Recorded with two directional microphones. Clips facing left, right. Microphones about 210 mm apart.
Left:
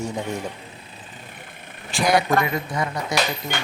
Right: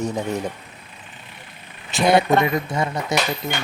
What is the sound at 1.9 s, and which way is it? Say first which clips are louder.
Speech: right 3 dB; 25° right (ahead or behind).